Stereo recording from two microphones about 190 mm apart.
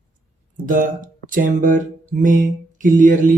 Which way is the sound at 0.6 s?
45° right (ahead or behind).